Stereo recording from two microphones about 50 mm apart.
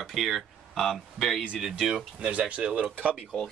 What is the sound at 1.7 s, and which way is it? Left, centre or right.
Speech, centre.